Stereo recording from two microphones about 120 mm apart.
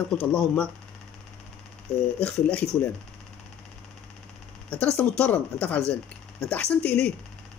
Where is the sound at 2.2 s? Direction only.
10° left (ahead or behind).